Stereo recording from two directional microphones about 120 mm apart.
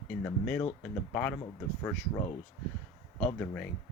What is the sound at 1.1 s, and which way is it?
Speech, 10° left (ahead or behind).